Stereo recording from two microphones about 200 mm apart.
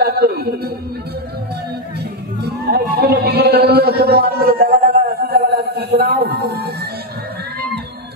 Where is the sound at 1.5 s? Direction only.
55° right (ahead or behind).